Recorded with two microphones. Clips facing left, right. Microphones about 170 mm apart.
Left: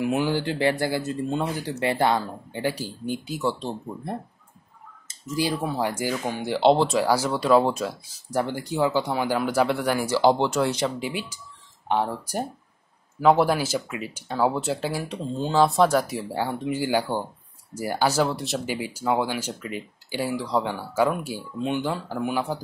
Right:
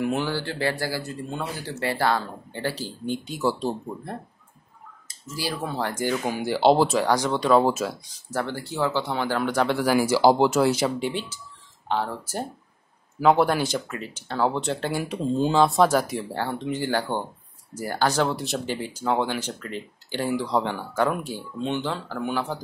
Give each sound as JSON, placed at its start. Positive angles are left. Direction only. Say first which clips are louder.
{"t": 0.0, "sound": "speech", "louder": "left 2 dB", "side_deg": 10}
{"t": 5.0, "sound": "speech", "louder": "left 5 dB", "side_deg": 20}
{"t": 6.2, "sound": "speech", "louder": "even", "side_deg": -5}
{"t": 8.3, "sound": "speech", "louder": "left 3 dB", "side_deg": 15}
{"t": 13.2, "sound": "speech", "louder": "even", "side_deg": 0}